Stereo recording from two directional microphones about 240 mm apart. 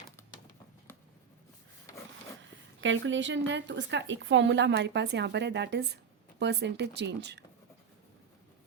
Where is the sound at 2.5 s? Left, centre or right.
Right.